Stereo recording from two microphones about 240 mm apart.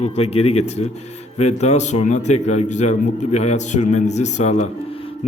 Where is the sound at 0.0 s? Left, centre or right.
Left.